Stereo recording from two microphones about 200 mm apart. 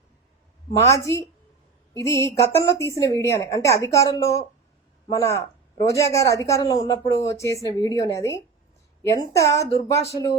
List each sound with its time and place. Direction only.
0.8 s speech: 15° left (ahead or behind)